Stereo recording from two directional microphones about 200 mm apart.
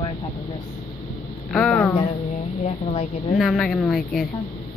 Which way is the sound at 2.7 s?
30° left (ahead or behind).